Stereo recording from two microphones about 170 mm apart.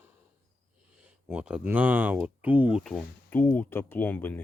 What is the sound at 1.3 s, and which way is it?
Speech, 5° right (ahead or behind).